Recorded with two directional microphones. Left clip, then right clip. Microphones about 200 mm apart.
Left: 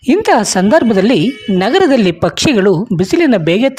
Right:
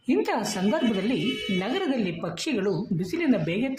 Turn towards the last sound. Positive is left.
turn(degrees=50)  # may be behind; listen again after turning